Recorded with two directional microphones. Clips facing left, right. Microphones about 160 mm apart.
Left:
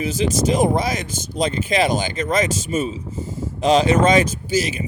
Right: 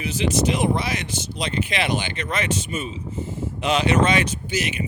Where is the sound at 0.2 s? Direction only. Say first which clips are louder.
Left 3 dB; 35° left (ahead or behind).